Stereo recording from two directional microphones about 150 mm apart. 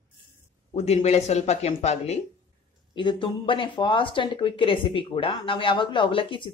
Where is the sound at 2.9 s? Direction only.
30° left (ahead or behind).